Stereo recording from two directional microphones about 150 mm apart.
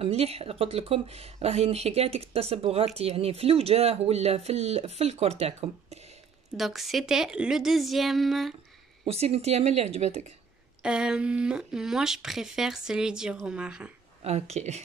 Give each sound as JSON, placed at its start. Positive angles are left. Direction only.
{"t": 0.0, "sound": "speech", "side_deg": -45}
{"t": 6.5, "sound": "speech", "side_deg": 0}
{"t": 9.0, "sound": "speech", "side_deg": -45}
{"t": 10.8, "sound": "speech", "side_deg": -5}
{"t": 14.2, "sound": "speech", "side_deg": -45}